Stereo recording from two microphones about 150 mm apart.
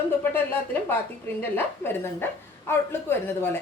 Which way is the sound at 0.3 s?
15° left (ahead or behind).